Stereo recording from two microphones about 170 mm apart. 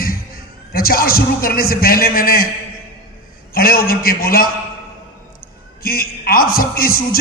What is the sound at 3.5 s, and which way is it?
Speech, 60° left (ahead or behind).